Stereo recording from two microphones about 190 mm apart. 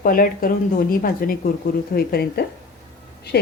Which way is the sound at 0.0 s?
50° left (ahead or behind).